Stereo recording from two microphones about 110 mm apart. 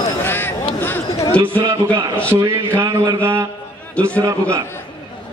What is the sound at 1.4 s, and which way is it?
Speech, 50° right (ahead or behind).